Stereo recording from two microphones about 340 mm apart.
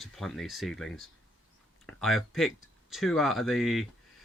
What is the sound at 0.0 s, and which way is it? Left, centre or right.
Speech, centre.